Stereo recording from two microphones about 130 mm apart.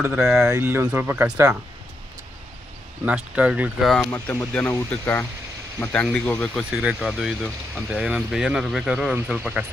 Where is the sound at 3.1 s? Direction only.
10° right (ahead or behind).